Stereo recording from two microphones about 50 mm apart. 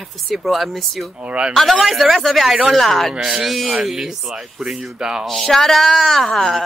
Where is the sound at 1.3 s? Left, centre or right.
Right.